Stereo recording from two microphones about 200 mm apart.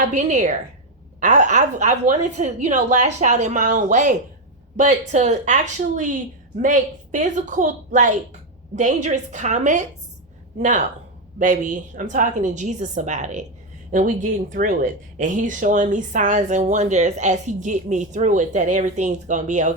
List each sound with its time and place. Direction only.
0.1 s speech: 40° right (ahead or behind)
6.6 s speech: 40° right (ahead or behind)